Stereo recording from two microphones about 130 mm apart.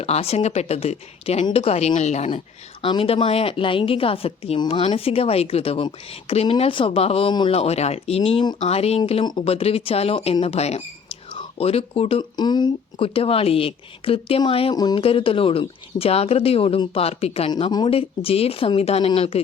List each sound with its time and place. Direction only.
0.0 s a woman's voice: 50° left (ahead or behind)
2.8 s a woman's voice: 45° left (ahead or behind)
9.2 s speech: 35° left (ahead or behind)
9.5 s a woman's voice: 50° left (ahead or behind)
12.4 s a woman's voice: 35° left (ahead or behind)
14.8 s speech: 30° left (ahead or behind)
15.0 s a woman's voice: 45° left (ahead or behind)
17.5 s speech: 35° left (ahead or behind)
17.9 s a woman's voice: 45° left (ahead or behind)